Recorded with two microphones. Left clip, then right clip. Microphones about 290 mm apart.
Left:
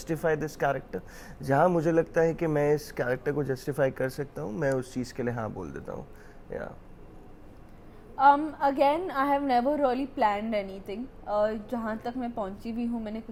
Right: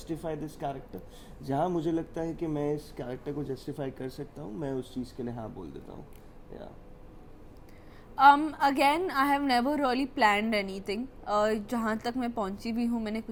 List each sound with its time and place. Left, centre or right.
0.1 s speech: left
1.5 s a man's voice: left
2.1 s speech: left
8.1 s a woman's voice: right